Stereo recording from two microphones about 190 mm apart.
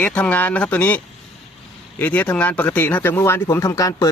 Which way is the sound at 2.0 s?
10° left (ahead or behind).